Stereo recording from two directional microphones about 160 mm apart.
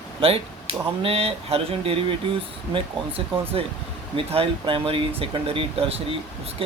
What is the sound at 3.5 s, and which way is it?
Speech, 35° right (ahead or behind).